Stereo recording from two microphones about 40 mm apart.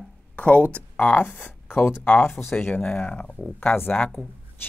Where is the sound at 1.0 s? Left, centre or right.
Left.